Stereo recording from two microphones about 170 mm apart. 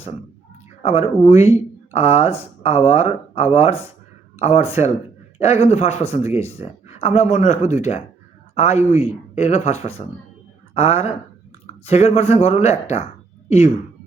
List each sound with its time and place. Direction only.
0.8 s speech: 40° left (ahead or behind)